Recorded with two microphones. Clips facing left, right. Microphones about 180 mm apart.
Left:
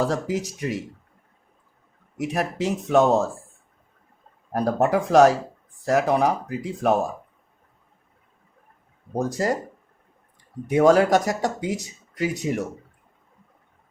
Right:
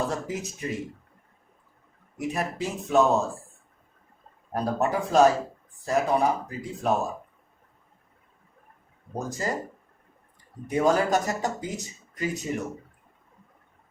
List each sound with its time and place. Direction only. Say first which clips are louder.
0.0 s speech: left 5 dB; 80° left
2.1 s speech: left 4 dB; 85° left
4.5 s speech: left 5 dB; 75° left (ahead or behind)
9.1 s speech: left 7 dB; 75° left (ahead or behind)
10.7 s speech: left 6 dB; 75° left (ahead or behind)